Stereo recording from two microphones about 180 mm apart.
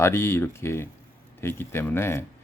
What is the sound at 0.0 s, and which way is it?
Speech, 15° left (ahead or behind).